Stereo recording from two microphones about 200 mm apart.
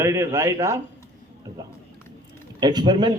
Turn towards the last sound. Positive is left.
turn(degrees=-20)  # may be behind; listen again after turning